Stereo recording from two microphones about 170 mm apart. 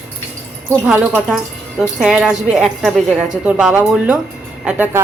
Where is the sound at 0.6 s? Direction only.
15° right (ahead or behind).